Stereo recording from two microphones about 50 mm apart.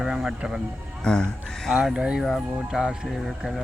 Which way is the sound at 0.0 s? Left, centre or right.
Centre.